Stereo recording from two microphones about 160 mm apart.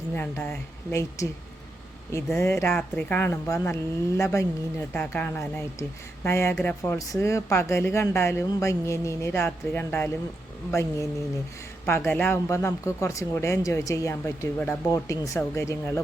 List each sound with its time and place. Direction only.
0.1 s speech: 15° left (ahead or behind)